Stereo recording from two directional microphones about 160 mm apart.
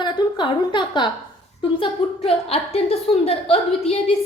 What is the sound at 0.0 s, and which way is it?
A woman's voice, 30° left (ahead or behind).